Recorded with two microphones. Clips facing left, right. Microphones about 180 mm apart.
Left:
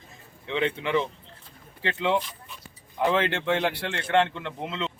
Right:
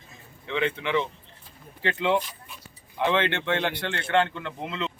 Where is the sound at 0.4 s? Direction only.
30° left (ahead or behind).